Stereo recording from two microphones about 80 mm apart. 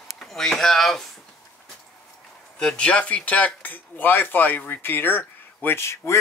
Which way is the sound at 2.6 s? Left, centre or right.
Centre.